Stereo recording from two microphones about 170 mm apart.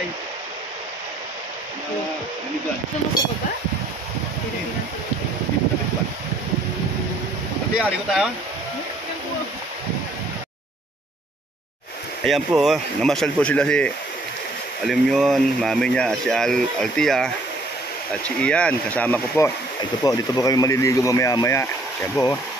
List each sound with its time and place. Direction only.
7.8 s speech: 5° right (ahead or behind)
12.3 s speech: centre (ahead or behind); by 22.1 s 15° left (ahead or behind)